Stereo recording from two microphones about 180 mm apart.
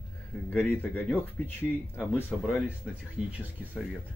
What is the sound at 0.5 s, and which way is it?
Speech, 10° left (ahead or behind).